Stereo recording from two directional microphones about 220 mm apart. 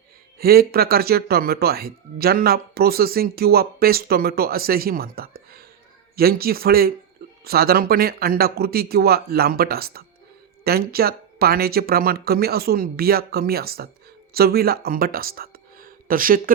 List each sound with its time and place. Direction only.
0.3 s speech: 45° right (ahead or behind)